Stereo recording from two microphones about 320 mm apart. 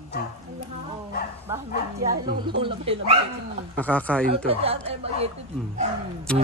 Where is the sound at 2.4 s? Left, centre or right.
Centre.